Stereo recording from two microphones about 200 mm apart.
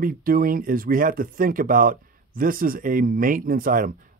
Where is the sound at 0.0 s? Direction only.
45° right (ahead or behind).